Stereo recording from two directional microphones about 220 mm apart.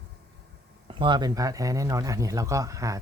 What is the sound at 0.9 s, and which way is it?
A man's voice, 20° right (ahead or behind).